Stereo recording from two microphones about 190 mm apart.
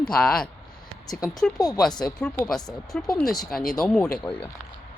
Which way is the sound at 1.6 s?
20° left (ahead or behind).